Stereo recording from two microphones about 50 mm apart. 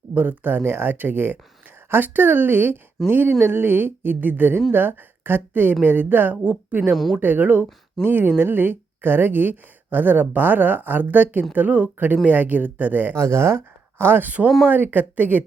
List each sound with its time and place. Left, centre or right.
0.1 s a woman's voice: right
6.9 s a woman's voice: centre
7.2 s speech: right
13.1 s speech: right
14.0 s speech: right